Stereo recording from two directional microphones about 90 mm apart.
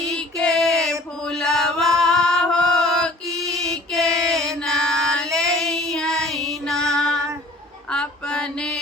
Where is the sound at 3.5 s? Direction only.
5° left (ahead or behind).